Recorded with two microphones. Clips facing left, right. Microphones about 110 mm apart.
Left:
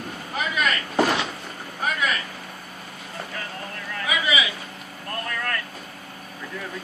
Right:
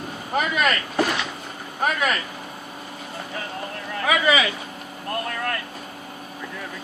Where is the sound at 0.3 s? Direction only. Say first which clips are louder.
Right 4 dB; 45° right (ahead or behind).